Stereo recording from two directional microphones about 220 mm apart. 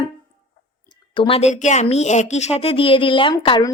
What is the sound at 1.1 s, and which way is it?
A woman's voice, 25° left (ahead or behind).